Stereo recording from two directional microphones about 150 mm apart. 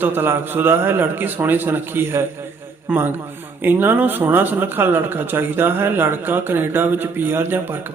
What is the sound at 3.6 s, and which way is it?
A man's voice, 15° right (ahead or behind).